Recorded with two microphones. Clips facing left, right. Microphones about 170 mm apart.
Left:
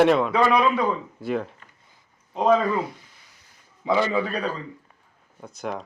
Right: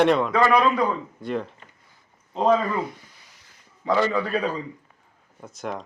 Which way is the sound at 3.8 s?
5° left (ahead or behind).